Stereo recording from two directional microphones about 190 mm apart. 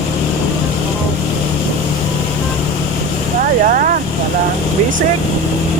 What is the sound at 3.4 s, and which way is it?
Vehicle, 45° right (ahead or behind).